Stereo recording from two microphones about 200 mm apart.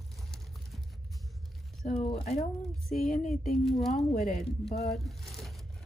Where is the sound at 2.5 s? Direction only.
Centre (ahead or behind).